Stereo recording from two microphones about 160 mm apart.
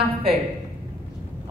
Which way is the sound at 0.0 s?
35° right (ahead or behind).